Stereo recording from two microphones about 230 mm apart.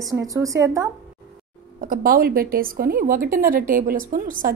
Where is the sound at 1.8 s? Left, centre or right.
Right.